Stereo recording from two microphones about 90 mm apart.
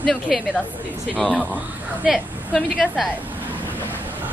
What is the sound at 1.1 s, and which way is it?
A woman's voice, centre (ahead or behind).